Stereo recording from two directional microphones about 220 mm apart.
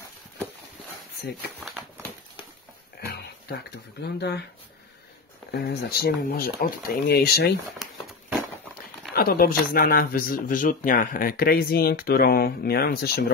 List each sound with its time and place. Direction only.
3.1 s a sound: 45° left (ahead or behind)
4.0 s speech: 50° left (ahead or behind)
5.5 s speech: 45° left (ahead or behind)
9.1 s speech: 45° left (ahead or behind)